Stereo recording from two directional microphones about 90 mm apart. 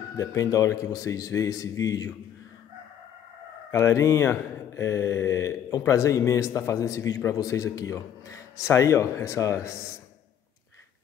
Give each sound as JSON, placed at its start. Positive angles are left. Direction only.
{"t": 0.2, "sound": "speech", "side_deg": 40}
{"t": 3.7, "sound": "speech", "side_deg": 35}